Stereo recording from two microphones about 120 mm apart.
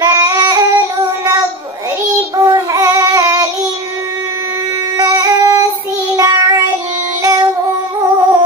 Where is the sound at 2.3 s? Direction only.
30° right (ahead or behind).